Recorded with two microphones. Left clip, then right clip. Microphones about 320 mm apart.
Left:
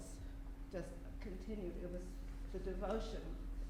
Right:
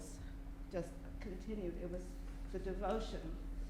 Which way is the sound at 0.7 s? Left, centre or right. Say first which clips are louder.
Right 4 dB; right.